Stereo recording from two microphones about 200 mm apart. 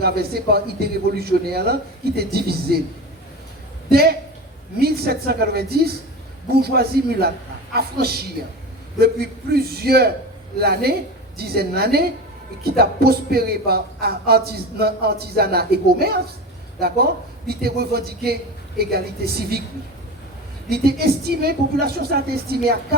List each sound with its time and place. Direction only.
0.0 s speech: 50° right (ahead or behind)
3.9 s speech: 50° right (ahead or behind)
20.7 s speech: 50° right (ahead or behind)